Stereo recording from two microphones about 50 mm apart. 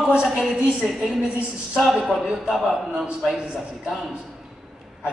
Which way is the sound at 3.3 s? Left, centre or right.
Centre.